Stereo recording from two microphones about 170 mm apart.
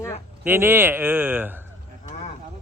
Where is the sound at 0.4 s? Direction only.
10° right (ahead or behind).